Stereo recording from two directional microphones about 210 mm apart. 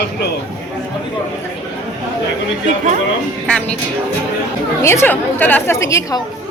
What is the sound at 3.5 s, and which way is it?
Speech, 5° left (ahead or behind).